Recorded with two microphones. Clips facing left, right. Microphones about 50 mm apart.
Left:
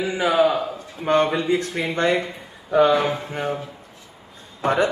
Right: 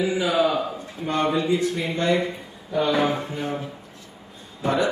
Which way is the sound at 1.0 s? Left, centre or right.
Left.